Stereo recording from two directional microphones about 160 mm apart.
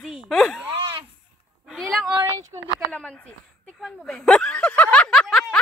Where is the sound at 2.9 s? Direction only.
10° left (ahead or behind).